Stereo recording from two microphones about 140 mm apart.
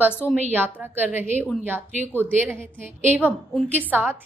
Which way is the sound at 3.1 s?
15° right (ahead or behind).